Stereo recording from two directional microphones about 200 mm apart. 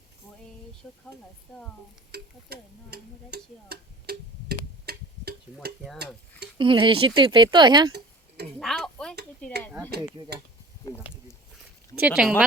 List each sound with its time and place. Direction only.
0.8 s speech: centre (ahead or behind)
2.1 s tick-tock: 55° right (ahead or behind)
6.6 s speech: 25° right (ahead or behind)
8.5 s a sound: centre (ahead or behind)
9.4 s speech: 5° left (ahead or behind)
11.9 s speech: 5° right (ahead or behind)